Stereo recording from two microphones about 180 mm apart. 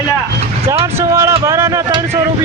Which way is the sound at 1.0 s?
15° right (ahead or behind).